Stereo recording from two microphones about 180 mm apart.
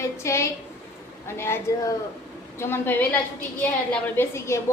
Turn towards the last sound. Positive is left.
turn(degrees=15)  # may be behind; listen again after turning